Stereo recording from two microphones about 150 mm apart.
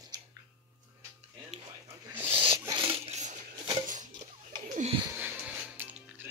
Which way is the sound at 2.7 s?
40° right (ahead or behind).